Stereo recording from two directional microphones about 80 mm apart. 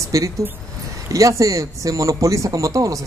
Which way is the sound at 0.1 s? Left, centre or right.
Right.